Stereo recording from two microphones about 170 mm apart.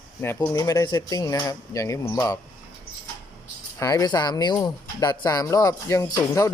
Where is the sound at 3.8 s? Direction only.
20° left (ahead or behind).